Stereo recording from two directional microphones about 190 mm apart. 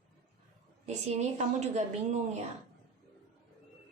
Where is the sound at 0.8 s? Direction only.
35° right (ahead or behind).